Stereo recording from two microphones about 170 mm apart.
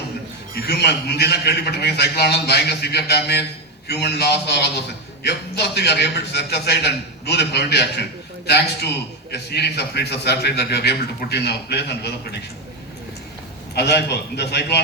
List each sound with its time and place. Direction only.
0.7 s a man's voice: 75° left (ahead or behind)
13.7 s a man's voice: 75° left (ahead or behind)